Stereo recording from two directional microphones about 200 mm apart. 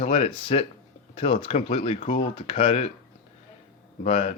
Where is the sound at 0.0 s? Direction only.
30° left (ahead or behind).